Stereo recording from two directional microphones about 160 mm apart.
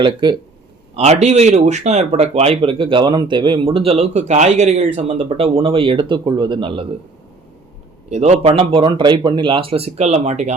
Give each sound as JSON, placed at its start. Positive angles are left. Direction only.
{"t": 0.0, "sound": "speech", "side_deg": -30}
{"t": 0.9, "sound": "speech", "side_deg": -45}
{"t": 8.1, "sound": "speech", "side_deg": -40}